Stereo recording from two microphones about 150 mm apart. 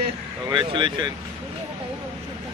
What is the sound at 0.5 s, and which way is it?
Speech, 35° right (ahead or behind).